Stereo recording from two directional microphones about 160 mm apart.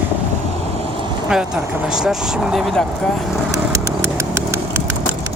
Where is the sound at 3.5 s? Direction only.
20° right (ahead or behind).